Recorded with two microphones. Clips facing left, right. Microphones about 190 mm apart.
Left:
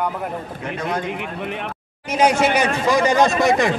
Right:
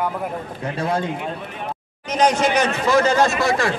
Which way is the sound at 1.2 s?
70° left (ahead or behind).